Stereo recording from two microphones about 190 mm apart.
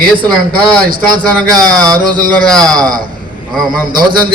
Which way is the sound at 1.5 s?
20° right (ahead or behind).